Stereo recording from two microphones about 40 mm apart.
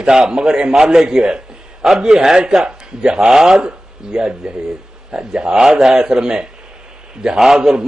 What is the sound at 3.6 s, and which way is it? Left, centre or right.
A man's voice, centre.